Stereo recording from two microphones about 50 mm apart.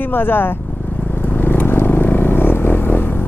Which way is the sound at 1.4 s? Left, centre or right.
Left.